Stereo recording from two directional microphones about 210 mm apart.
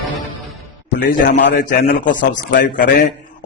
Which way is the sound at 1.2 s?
45° left (ahead or behind).